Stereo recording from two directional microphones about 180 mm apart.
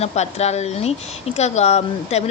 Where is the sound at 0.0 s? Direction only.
35° left (ahead or behind).